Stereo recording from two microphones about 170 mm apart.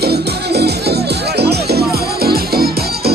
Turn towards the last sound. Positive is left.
turn(degrees=-65)  # may be behind; listen again after turning